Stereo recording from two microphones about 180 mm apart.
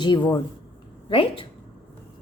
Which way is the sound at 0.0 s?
25° left (ahead or behind).